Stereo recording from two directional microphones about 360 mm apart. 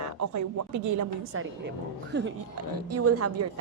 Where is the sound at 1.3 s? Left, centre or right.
Right.